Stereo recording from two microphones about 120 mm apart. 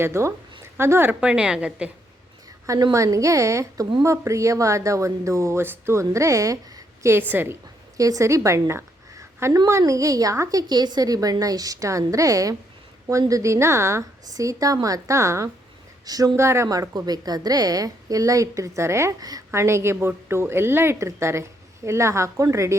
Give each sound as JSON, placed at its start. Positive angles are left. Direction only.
{"t": 0.0, "sound": "a woman's voice", "side_deg": -20}
{"t": 0.6, "sound": "a sound", "side_deg": -20}
{"t": 1.2, "sound": "a woman's voice", "side_deg": -10}
{"t": 2.6, "sound": "a woman's voice", "side_deg": -30}